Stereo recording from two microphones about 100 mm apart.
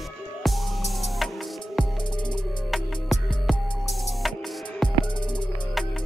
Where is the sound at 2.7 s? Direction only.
Centre (ahead or behind).